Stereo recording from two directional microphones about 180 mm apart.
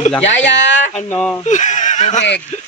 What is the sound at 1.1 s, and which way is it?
Speech, 10° left (ahead or behind).